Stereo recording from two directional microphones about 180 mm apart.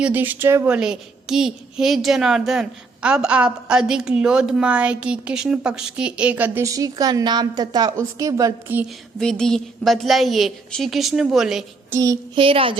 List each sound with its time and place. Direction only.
0.0 s a woman's voice: 10° right (ahead or behind)
9.1 s a woman's voice: 5° left (ahead or behind)
11.9 s child singing: 20° right (ahead or behind)
12.4 s a woman's voice: 30° right (ahead or behind)